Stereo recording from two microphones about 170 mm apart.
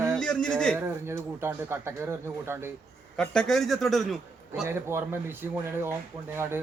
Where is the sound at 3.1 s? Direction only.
5° left (ahead or behind).